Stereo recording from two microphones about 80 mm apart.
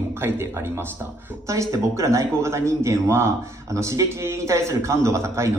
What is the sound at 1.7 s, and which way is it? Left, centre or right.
A man's voice, right.